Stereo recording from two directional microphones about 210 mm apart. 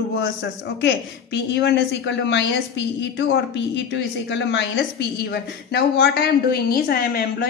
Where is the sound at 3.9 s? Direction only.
55° left (ahead or behind).